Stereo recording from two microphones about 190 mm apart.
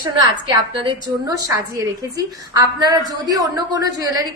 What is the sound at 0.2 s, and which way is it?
A woman's voice, 20° right (ahead or behind).